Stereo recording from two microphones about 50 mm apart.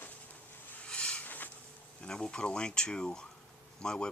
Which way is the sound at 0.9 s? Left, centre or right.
Left.